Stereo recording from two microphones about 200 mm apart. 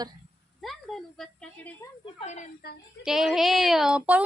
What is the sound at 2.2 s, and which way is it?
Speech, 35° left (ahead or behind).